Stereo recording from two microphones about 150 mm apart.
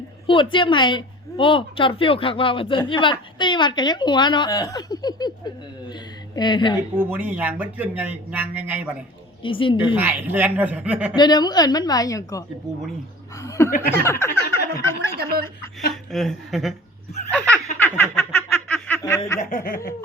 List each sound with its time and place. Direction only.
0.3 s a woman's voice: 35° left (ahead or behind)
7.1 s a man's voice: 10° right (ahead or behind)
9.4 s a woman's voice: 35° left (ahead or behind)
9.9 s a man's voice: 10° right (ahead or behind)
11.2 s a woman's voice: 25° left (ahead or behind)
15.2 s chuckle: 90° right
16.1 s a woman's voice: centre (ahead or behind)
17.3 s laughter: 10° left (ahead or behind)
17.7 s snicker: 15° left (ahead or behind)
19.4 s chuckle: 60° left (ahead or behind)